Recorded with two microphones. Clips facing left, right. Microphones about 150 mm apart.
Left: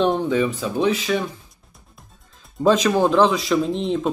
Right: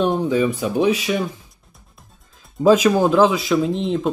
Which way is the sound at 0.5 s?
15° right (ahead or behind).